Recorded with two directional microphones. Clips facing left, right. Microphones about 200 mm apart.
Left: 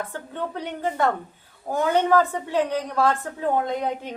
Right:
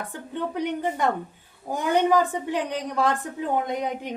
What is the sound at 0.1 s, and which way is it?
A woman's voice, 15° right (ahead or behind).